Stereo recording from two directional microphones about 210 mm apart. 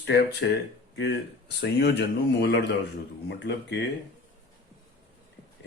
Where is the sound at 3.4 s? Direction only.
50° left (ahead or behind).